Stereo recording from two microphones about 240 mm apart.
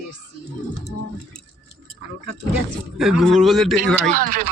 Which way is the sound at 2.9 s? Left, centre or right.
Centre.